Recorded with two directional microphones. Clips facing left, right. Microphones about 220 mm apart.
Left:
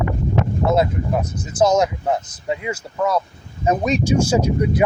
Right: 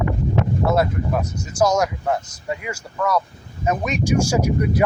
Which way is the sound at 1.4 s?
20° left (ahead or behind).